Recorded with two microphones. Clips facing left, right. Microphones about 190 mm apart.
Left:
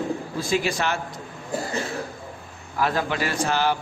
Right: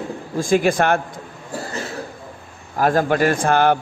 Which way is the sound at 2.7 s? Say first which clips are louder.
Right 7 dB; 45° right (ahead or behind).